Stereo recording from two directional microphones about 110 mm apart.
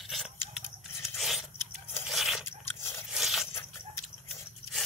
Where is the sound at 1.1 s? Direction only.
Centre (ahead or behind).